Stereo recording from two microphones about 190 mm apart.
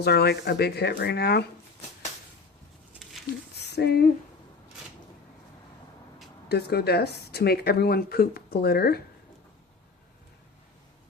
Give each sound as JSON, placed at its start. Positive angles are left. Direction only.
{"t": 0.0, "sound": "speech", "side_deg": 60}
{"t": 3.5, "sound": "a sound", "side_deg": 60}
{"t": 6.5, "sound": "speech", "side_deg": 60}